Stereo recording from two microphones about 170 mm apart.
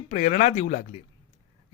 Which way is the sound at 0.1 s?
45° left (ahead or behind).